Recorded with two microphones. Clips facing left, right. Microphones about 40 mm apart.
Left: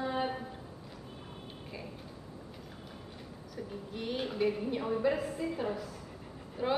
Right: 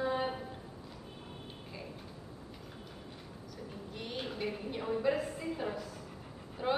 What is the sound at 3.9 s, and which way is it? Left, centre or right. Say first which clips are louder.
A woman's voice: left 6 dB; centre.